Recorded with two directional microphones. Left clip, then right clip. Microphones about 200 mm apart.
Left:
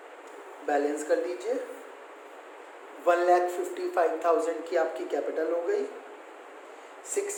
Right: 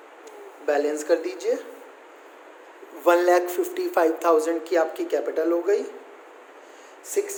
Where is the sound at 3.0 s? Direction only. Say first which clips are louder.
Right 4 dB; 60° right (ahead or behind).